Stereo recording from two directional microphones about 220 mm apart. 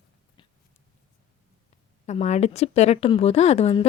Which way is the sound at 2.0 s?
30° left (ahead or behind).